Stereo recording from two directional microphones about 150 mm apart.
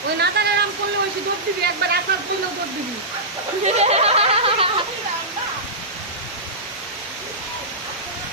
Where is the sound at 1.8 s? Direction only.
90° right.